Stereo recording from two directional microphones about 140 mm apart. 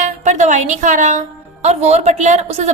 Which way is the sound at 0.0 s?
60° right (ahead or behind).